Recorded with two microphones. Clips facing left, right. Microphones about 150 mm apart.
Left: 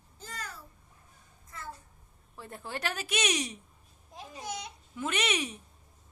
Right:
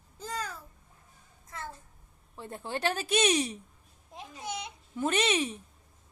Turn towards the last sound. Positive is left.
turn(degrees=-30)  # may be behind; listen again after turning